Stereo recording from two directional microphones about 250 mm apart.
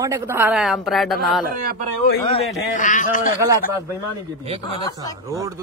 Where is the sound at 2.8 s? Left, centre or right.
Left.